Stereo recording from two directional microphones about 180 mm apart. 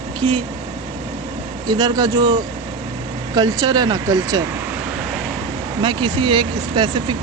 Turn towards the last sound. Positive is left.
turn(degrees=-25)  # may be behind; listen again after turning